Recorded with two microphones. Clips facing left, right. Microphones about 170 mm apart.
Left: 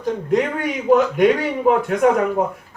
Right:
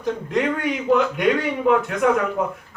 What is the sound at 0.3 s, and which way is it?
A man's voice, 45° left (ahead or behind).